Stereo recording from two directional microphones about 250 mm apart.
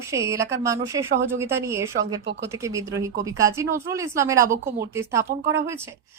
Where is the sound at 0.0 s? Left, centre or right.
Centre.